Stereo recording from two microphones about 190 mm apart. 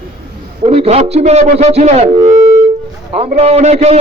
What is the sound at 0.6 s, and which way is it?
A man's voice, 30° right (ahead or behind).